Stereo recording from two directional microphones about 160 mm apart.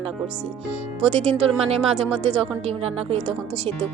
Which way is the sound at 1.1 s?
35° right (ahead or behind).